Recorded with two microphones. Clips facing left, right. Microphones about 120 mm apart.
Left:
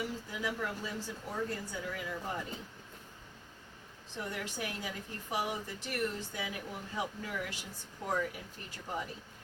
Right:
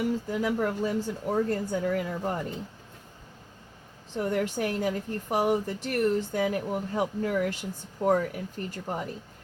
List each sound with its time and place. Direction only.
0.0 s speech: 50° right (ahead or behind)
4.2 s speech: 50° right (ahead or behind)